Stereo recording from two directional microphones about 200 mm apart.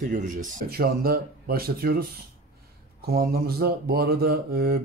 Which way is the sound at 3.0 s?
45° right (ahead or behind).